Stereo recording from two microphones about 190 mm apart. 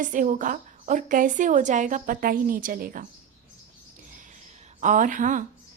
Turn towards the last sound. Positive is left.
turn(degrees=-40)  # may be behind; listen again after turning